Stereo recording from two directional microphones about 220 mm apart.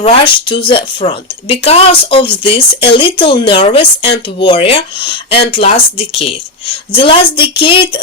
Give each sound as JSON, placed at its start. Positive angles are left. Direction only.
{"t": 0.0, "sound": "speech", "side_deg": 25}